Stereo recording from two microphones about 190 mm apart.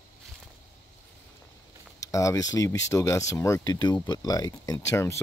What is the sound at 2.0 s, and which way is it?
Speech, 15° left (ahead or behind).